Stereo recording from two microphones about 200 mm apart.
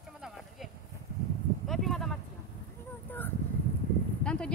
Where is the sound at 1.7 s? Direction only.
Centre (ahead or behind).